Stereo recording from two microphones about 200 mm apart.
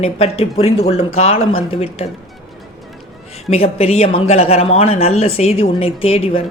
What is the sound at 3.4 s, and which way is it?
Speech, 30° left (ahead or behind).